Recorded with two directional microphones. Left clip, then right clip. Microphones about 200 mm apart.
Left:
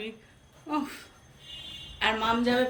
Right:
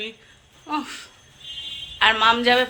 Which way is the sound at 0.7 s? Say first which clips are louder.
Right 4 dB; 10° left (ahead or behind).